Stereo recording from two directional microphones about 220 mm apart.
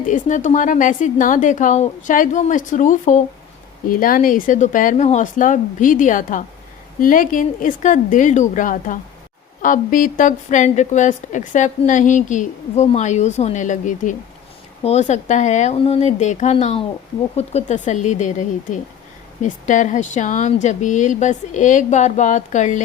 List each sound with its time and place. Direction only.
0.0 s a woman's voice: 35° left (ahead or behind)